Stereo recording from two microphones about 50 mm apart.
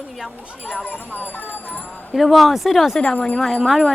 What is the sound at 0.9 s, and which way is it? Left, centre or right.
Speech, left.